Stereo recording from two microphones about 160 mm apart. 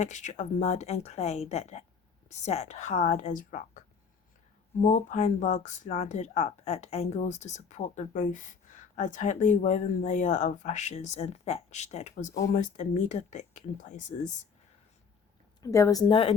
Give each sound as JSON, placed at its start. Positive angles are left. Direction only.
{"t": 0.0, "sound": "speech", "side_deg": 50}
{"t": 15.6, "sound": "a woman's voice", "side_deg": 20}